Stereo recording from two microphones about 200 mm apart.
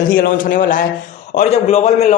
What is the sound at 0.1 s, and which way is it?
A man's voice, 45° left (ahead or behind).